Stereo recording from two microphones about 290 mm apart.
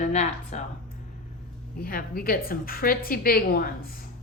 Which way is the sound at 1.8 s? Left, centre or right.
Left.